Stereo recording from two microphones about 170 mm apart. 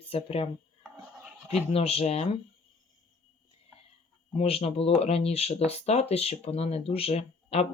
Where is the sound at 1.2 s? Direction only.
10° right (ahead or behind).